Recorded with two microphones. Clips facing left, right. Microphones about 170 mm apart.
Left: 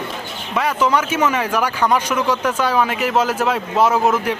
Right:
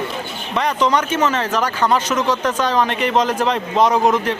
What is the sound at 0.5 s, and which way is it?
Speech, 5° left (ahead or behind).